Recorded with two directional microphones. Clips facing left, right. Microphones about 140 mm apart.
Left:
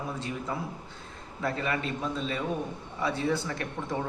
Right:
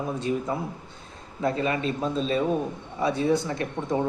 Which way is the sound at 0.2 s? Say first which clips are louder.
Right 6 dB; 20° right (ahead or behind).